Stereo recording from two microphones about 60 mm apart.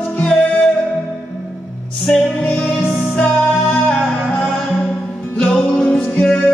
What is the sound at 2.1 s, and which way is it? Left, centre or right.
Music, centre.